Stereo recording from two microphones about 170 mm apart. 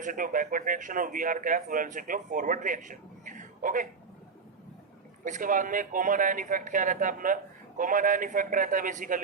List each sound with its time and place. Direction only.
0.0 s a man's voice: 50° right (ahead or behind)
5.2 s a man's voice: 50° right (ahead or behind)